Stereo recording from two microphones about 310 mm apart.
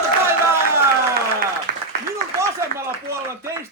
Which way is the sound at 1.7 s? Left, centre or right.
Right.